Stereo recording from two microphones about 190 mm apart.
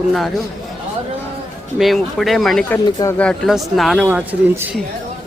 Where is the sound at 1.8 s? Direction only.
Centre (ahead or behind).